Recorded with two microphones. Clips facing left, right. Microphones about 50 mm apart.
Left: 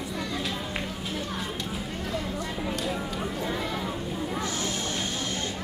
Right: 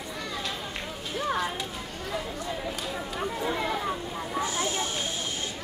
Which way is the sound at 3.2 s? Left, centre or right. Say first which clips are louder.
Right 1 dB; centre.